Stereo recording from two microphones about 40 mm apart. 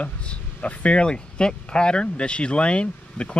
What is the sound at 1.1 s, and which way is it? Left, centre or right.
Speech, left.